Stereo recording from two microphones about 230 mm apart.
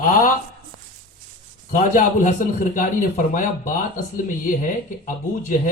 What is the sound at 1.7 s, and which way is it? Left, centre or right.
A man's voice, left.